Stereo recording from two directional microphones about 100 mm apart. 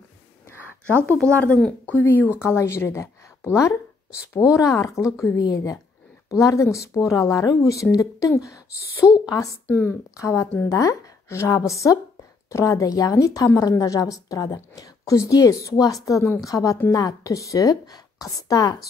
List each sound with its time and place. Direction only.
1.5 s a woman's voice: 10° left (ahead or behind); by 9.6 s 35° left (ahead or behind)
9.7 s a woman's voice: 25° left (ahead or behind)